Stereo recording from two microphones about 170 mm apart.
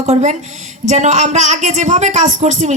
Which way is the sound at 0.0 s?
45° right (ahead or behind).